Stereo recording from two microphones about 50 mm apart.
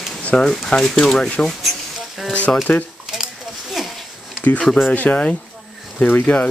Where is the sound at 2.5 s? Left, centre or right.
Centre.